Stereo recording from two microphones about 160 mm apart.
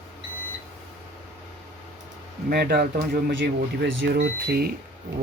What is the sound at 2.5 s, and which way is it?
Speech, 85° right.